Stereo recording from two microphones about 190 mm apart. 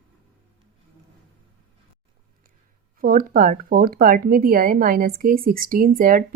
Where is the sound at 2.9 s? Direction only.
50° right (ahead or behind).